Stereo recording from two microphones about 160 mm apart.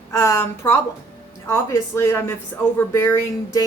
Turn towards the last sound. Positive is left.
turn(degrees=15)  # may be behind; listen again after turning